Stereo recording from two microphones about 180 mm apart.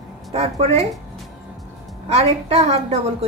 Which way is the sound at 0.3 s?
35° right (ahead or behind).